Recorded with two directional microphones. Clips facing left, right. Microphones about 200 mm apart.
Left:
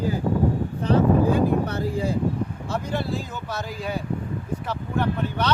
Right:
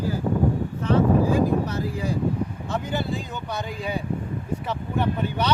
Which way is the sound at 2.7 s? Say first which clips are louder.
Left 1 dB; centre (ahead or behind).